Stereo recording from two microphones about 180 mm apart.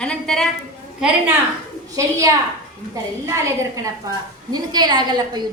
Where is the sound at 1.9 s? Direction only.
20° right (ahead or behind).